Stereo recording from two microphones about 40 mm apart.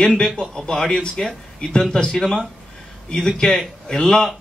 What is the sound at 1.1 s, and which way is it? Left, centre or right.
A man's voice, centre.